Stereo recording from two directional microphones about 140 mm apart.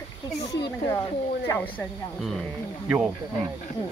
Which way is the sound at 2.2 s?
Centre (ahead or behind).